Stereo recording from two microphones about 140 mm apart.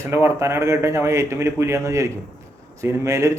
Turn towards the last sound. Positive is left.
turn(degrees=-20)  # may be behind; listen again after turning